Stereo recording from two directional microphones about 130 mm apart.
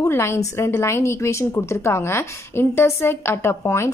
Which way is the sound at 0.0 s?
20° left (ahead or behind).